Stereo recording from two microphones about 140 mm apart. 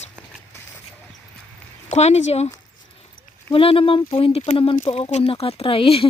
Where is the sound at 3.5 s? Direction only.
40° left (ahead or behind).